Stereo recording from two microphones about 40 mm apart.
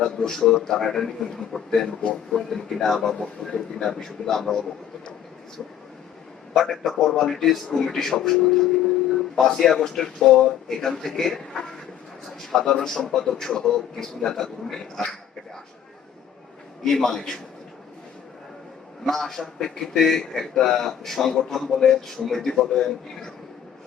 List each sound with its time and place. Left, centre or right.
0.3 s a man's voice: centre
6.5 s a man's voice: centre
16.8 s a man's voice: centre
19.0 s a man's voice: centre